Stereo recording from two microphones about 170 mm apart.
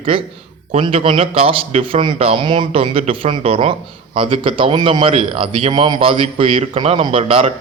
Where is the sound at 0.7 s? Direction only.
35° right (ahead or behind).